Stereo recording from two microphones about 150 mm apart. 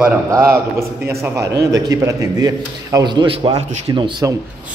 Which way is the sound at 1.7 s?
25° right (ahead or behind).